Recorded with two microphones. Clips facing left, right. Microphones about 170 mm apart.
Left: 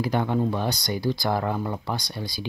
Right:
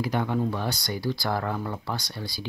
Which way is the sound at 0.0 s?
30° left (ahead or behind).